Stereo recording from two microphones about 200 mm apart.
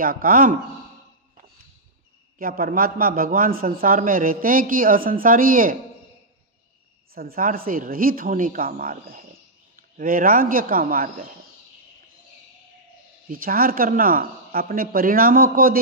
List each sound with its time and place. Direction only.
0.0 s a man's voice: 45° right (ahead or behind)
2.3 s a man's voice: 45° right (ahead or behind)
7.2 s a man's voice: 45° right (ahead or behind)
13.3 s a man's voice: 45° right (ahead or behind)